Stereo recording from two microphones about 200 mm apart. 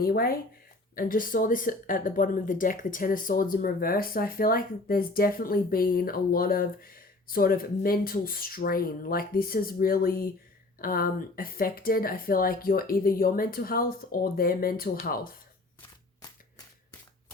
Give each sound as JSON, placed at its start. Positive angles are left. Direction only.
{"t": 0.0, "sound": "speech", "side_deg": 50}